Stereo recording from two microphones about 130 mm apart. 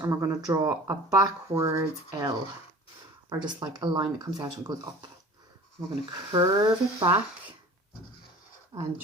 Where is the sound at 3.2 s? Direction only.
35° right (ahead or behind).